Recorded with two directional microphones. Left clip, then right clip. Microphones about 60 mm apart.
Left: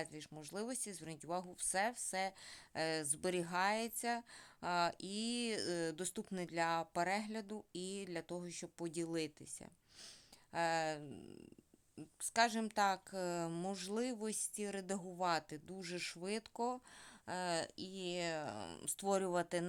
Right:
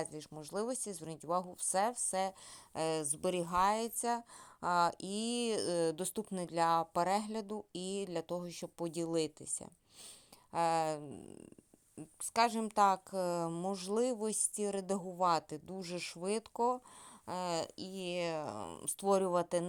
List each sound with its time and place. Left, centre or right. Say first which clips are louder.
0.0 s speech: right 5 dB; right
4.6 s speech: right 6 dB; right
11.0 s speech: right 4 dB; centre
12.3 s speech: right 3 dB; right
18.7 s speech: right 6 dB; centre